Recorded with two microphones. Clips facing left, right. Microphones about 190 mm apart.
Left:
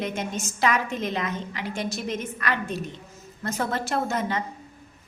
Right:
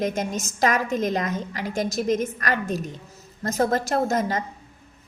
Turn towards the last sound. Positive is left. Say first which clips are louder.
# right 3 dB
turn(degrees=-40)  # may be behind; listen again after turning